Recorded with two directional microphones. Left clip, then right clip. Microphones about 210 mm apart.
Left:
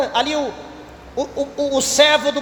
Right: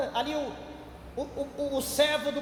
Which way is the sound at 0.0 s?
30° left (ahead or behind).